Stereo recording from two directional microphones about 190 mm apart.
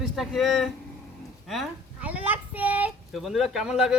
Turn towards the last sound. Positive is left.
turn(degrees=-5)  # may be behind; listen again after turning